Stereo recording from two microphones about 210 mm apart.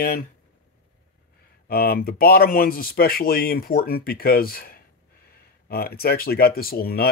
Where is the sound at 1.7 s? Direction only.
45° left (ahead or behind).